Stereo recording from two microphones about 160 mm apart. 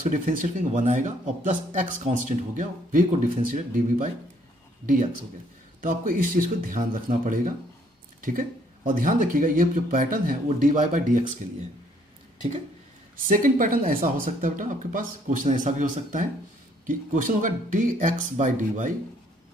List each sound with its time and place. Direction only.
0.0 s speech: 55° right (ahead or behind)
5.8 s speech: 60° right (ahead or behind)
13.3 s speech: 60° right (ahead or behind)